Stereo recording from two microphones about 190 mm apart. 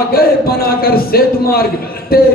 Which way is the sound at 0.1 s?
50° left (ahead or behind).